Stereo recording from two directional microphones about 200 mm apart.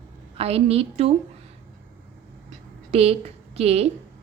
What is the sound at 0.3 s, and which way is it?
Speech, 30° right (ahead or behind).